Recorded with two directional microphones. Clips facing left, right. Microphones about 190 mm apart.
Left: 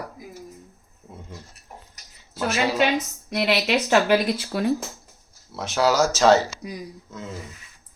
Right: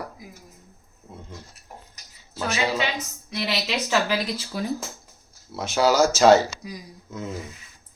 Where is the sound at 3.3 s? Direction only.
60° left (ahead or behind).